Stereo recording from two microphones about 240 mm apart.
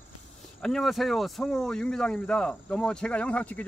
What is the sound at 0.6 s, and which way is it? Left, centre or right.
Speech, centre.